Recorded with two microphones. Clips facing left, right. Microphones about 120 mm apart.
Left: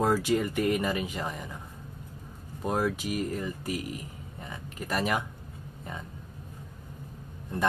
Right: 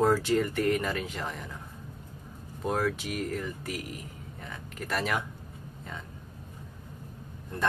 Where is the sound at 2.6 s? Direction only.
10° left (ahead or behind).